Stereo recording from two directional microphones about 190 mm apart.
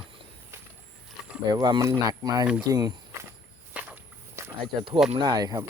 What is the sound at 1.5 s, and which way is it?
Speech, 25° right (ahead or behind).